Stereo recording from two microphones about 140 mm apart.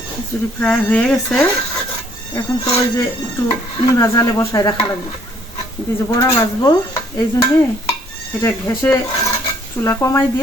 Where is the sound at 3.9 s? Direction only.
20° left (ahead or behind).